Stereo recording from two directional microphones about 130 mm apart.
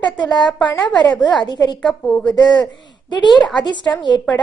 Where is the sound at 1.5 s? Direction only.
35° left (ahead or behind).